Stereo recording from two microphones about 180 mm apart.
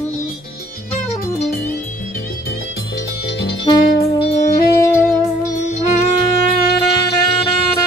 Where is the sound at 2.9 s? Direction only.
70° left (ahead or behind).